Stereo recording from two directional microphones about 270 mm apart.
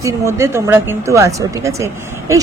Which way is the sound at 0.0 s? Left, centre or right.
Centre.